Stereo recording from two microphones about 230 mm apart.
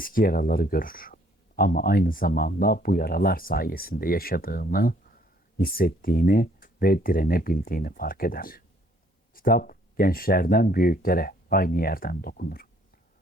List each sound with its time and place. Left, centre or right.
0.0 s speech: left